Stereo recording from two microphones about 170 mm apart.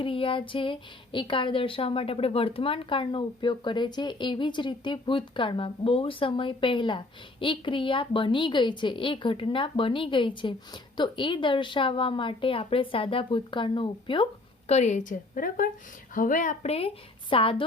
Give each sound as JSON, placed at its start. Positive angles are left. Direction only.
{"t": 0.0, "sound": "speech", "side_deg": 30}
{"t": 14.7, "sound": "a woman's voice", "side_deg": 40}
{"t": 16.7, "sound": "a woman's voice", "side_deg": 35}